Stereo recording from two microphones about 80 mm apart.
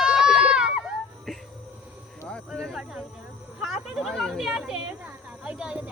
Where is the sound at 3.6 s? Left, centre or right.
Centre.